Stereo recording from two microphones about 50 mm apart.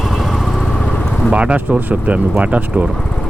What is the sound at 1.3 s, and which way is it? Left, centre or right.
Speech, right.